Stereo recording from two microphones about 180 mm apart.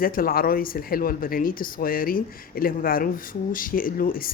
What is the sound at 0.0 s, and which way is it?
A woman's voice, 55° left (ahead or behind).